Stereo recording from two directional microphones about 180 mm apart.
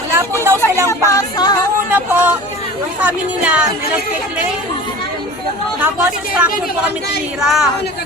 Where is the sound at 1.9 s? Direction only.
10° right (ahead or behind).